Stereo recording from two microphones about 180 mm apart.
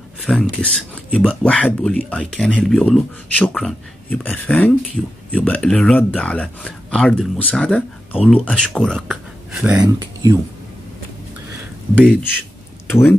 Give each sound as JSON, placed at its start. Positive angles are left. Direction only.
{"t": 0.2, "sound": "speech", "side_deg": 5}
{"t": 9.8, "sound": "speech", "side_deg": -20}